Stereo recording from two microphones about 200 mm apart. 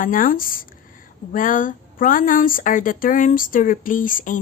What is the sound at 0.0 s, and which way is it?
A woman's voice, 45° left (ahead or behind).